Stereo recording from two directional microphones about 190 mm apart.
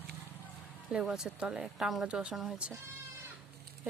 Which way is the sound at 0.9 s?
5° right (ahead or behind).